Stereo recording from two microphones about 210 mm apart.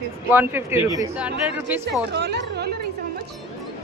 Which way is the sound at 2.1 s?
55° right (ahead or behind).